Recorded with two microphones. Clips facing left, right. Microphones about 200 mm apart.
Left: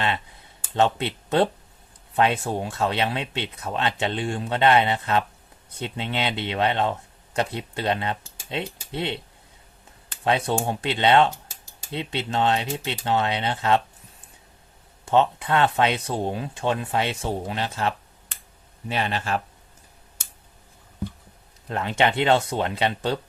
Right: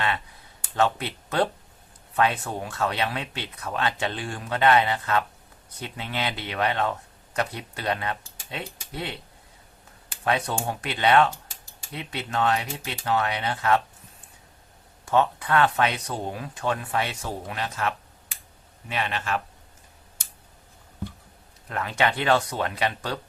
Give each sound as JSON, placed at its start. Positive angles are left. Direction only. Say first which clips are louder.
{"t": 0.8, "sound": "speech", "louder": "left 2 dB", "side_deg": 25}
{"t": 10.2, "sound": "speech", "louder": "left 3 dB", "side_deg": 25}
{"t": 15.0, "sound": "speech", "louder": "left 2 dB", "side_deg": 25}
{"t": 18.3, "sound": "a sound", "louder": "left 1 dB", "side_deg": -10}
{"t": 18.9, "sound": "speech", "louder": "left 3 dB", "side_deg": 35}
{"t": 21.7, "sound": "speech", "louder": "left 3 dB", "side_deg": 25}